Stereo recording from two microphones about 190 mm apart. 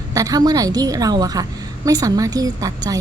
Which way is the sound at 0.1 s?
20° right (ahead or behind).